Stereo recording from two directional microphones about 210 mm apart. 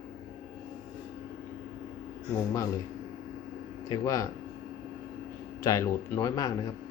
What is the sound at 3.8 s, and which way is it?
Speech, 15° left (ahead or behind).